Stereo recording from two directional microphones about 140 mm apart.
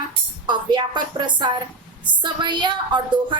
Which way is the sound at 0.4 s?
35° right (ahead or behind).